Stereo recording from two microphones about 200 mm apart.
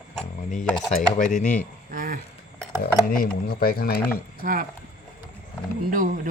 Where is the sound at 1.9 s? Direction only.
45° right (ahead or behind).